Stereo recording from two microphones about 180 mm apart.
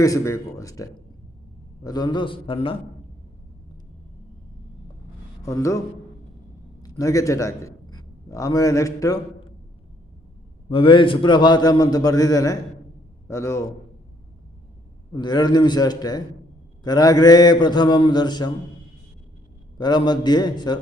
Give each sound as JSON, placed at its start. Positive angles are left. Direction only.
{"t": 0.0, "sound": "a man's voice", "side_deg": 20}
{"t": 5.4, "sound": "speech", "side_deg": 15}
{"t": 6.8, "sound": "a man's voice", "side_deg": 20}
{"t": 10.7, "sound": "a man's voice", "side_deg": 30}
{"t": 15.1, "sound": "a man's voice", "side_deg": 25}
{"t": 19.8, "sound": "a man's voice", "side_deg": 25}